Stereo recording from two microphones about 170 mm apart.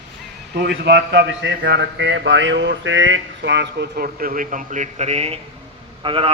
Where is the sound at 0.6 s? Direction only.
80° right.